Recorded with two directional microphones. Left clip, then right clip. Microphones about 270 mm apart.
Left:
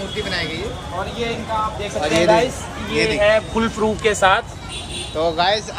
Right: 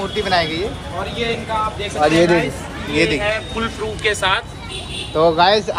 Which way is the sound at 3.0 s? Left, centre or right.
Left.